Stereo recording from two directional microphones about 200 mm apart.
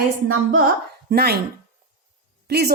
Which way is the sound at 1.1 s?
50° right (ahead or behind).